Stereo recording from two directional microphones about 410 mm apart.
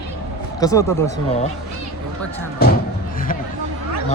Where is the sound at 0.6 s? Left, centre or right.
Centre.